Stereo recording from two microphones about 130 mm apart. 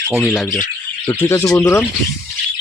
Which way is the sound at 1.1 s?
20° left (ahead or behind).